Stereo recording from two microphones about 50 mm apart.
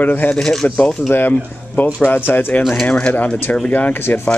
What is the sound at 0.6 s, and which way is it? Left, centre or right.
Speech, left.